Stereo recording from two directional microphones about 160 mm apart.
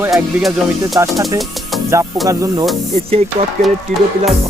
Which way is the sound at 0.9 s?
15° right (ahead or behind).